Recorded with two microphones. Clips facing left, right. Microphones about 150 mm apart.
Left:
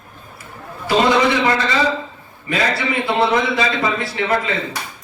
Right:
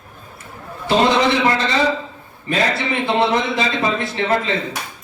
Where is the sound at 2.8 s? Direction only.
20° right (ahead or behind).